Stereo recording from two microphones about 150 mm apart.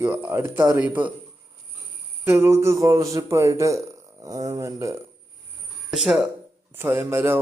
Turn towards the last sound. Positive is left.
turn(degrees=-15)  # may be behind; listen again after turning